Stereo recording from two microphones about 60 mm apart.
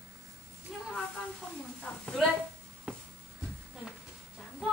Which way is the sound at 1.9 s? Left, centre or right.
Left.